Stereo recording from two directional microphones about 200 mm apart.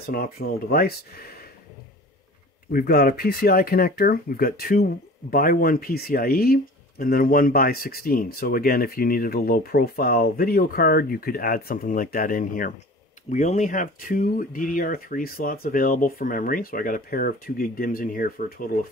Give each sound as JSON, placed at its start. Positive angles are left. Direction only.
{"t": 0.0, "sound": "speech", "side_deg": 50}
{"t": 2.7, "sound": "speech", "side_deg": 50}